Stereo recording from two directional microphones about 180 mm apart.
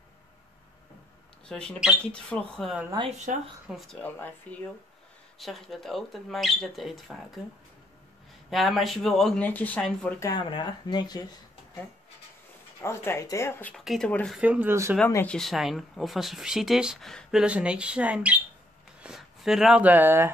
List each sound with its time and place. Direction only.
1.5 s speech: 5° left (ahead or behind)
3.3 s speech: 45° right (ahead or behind)
3.6 s speech: centre (ahead or behind)
4.0 s speech: 10° left (ahead or behind)
8.5 s speech: centre (ahead or behind)
10.2 s speech: 25° left (ahead or behind)
12.8 s speech: 15° left (ahead or behind)
14.4 s speech: 10° right (ahead or behind)
15.0 s speech: 10° left (ahead or behind); by 20.2 s 10° right (ahead or behind)